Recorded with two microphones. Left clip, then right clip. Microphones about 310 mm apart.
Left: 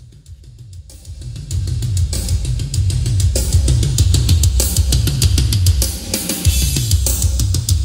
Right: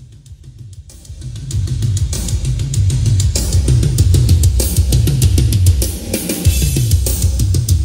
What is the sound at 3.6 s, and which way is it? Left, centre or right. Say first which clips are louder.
Music: right 1 dB; centre.